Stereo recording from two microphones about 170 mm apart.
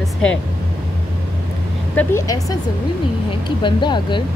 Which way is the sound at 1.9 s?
20° left (ahead or behind).